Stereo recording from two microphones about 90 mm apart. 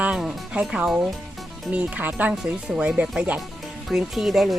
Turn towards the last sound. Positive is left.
turn(degrees=0)  # may be behind; listen again after turning